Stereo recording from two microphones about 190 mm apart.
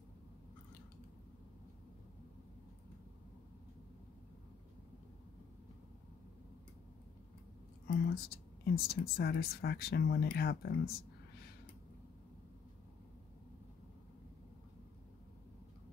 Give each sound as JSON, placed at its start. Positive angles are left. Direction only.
{"t": 7.9, "sound": "speech", "side_deg": 55}